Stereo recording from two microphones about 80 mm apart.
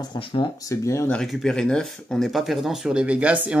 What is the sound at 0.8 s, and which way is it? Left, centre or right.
Speech, left.